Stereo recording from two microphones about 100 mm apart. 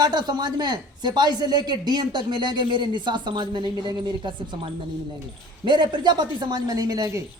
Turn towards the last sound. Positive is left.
turn(degrees=-35)  # may be behind; listen again after turning